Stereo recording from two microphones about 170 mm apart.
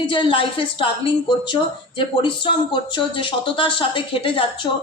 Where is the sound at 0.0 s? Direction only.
30° left (ahead or behind).